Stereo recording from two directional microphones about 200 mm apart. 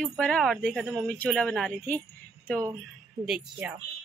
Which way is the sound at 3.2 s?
5° right (ahead or behind).